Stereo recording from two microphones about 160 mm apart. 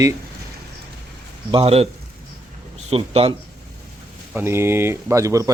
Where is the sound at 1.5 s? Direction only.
40° right (ahead or behind).